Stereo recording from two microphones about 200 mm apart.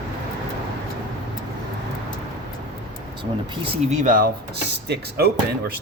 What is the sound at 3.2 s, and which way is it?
Speech, 30° right (ahead or behind).